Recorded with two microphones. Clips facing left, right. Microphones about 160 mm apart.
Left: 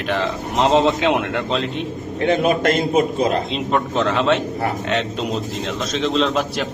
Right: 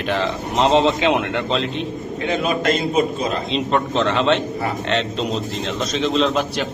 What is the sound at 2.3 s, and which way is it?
Speech, 50° left (ahead or behind).